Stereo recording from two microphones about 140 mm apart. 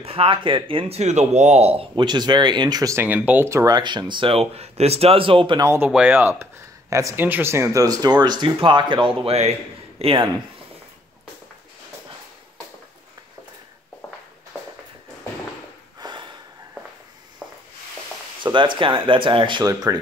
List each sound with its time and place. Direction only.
0.0 s speech: 40° right (ahead or behind)
2.0 s speech: 30° right (ahead or behind)
5.6 s speech: 20° right (ahead or behind)
5.9 s speech: 10° right (ahead or behind); by 10.3 s 40° right (ahead or behind)
16.0 s snort: 30° right (ahead or behind)
18.4 s a sound: 35° right (ahead or behind)
19.0 s speech: 35° right (ahead or behind)